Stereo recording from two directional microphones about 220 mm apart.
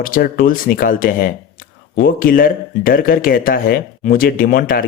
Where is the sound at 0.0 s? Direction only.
40° left (ahead or behind).